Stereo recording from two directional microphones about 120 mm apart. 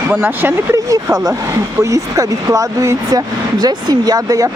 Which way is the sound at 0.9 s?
30° right (ahead or behind).